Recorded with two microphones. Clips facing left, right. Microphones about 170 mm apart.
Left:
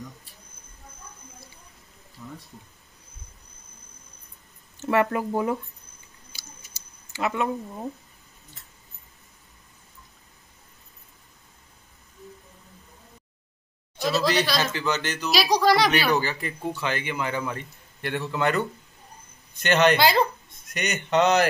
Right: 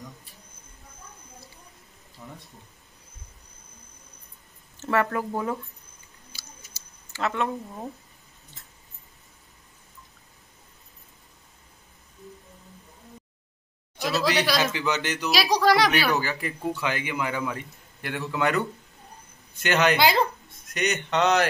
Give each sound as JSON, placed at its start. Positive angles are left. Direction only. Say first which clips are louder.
{"t": 4.8, "sound": "speech", "louder": "left 2 dB", "side_deg": 15}
{"t": 7.1, "sound": "speech", "louder": "left 1 dB", "side_deg": 10}
{"t": 13.9, "sound": "speech", "louder": "left 2 dB", "side_deg": -10}
{"t": 15.3, "sound": "speech", "louder": "left 1 dB", "side_deg": 0}
{"t": 19.6, "sound": "speech", "louder": "left 2 dB", "side_deg": -10}
{"t": 20.7, "sound": "speech", "louder": "left 2 dB", "side_deg": 0}